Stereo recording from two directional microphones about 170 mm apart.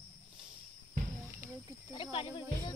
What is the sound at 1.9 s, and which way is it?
Speech, 30° left (ahead or behind).